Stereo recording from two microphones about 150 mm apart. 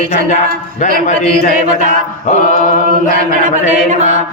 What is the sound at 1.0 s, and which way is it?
Mantra, 55° left (ahead or behind).